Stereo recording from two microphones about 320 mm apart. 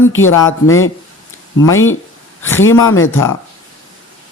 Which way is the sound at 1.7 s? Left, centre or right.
Left.